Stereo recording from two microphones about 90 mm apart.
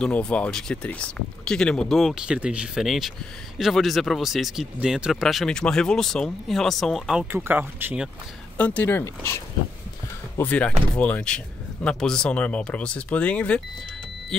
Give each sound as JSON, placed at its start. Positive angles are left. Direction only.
{"t": 0.0, "sound": "speech", "side_deg": 10}
{"t": 2.2, "sound": "speech", "side_deg": -10}
{"t": 7.2, "sound": "speech", "side_deg": -25}
{"t": 8.5, "sound": "speech", "side_deg": 15}
{"t": 10.3, "sound": "speech", "side_deg": 15}